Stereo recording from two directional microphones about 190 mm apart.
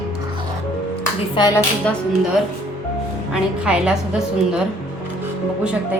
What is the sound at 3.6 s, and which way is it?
Speech, 5° right (ahead or behind).